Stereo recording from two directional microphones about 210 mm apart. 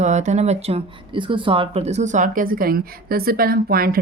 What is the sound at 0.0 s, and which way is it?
Speech, 35° right (ahead or behind).